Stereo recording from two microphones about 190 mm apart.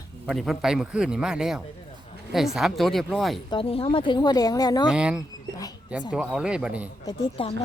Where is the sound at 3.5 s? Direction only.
30° left (ahead or behind).